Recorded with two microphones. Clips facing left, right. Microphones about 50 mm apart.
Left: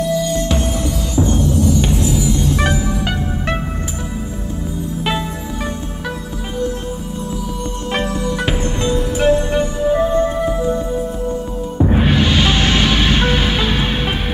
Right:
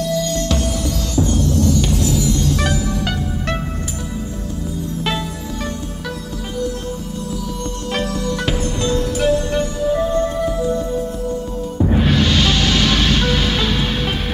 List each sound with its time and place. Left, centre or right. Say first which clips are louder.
0.0 s music: left 2 dB; centre
7.9 s music: left 2 dB; left